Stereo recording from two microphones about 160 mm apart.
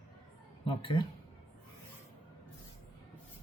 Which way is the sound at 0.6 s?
30° left (ahead or behind).